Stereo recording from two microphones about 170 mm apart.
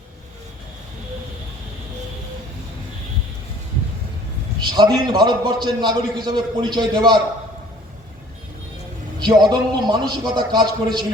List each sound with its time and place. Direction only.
4.8 s a man's voice: 25° right (ahead or behind)
9.1 s a man's voice: 25° right (ahead or behind)